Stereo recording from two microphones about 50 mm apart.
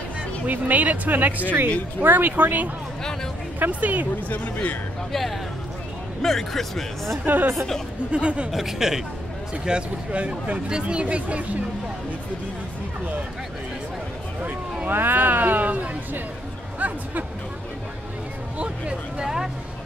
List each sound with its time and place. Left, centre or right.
0.5 s speech: right
4.3 s speech: left
6.2 s speech: centre
7.2 s speech: right
8.1 s speech: right
8.5 s speech: centre
9.7 s speech: right
14.9 s speech: right
16.8 s a sound: right
18.6 s speech: centre